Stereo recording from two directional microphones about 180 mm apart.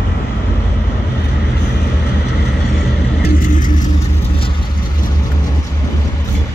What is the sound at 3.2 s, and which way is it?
Vehicle, 50° left (ahead or behind).